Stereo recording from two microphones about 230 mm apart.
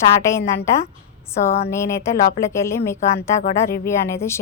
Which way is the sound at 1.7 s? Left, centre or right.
Centre.